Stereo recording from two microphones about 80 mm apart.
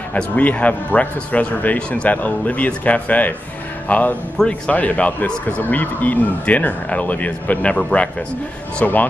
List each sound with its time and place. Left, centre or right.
0.1 s speech: centre